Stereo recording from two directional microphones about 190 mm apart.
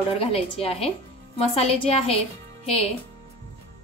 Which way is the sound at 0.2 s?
30° left (ahead or behind).